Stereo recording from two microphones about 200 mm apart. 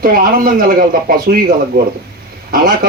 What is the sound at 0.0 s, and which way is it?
A man's voice, 45° right (ahead or behind).